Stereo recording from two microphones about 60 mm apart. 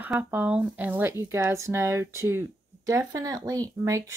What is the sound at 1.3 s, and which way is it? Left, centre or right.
Speech, right.